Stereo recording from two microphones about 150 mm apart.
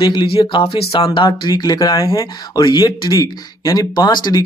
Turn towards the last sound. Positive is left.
turn(degrees=30)  # may be behind; listen again after turning